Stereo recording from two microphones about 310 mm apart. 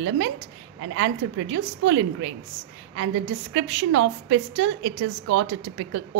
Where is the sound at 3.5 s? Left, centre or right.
Right.